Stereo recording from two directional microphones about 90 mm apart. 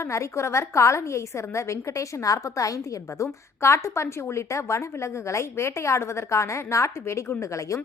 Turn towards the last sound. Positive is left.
turn(degrees=35)  # may be behind; listen again after turning